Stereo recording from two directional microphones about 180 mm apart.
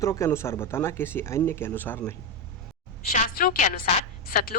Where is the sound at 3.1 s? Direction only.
45° left (ahead or behind).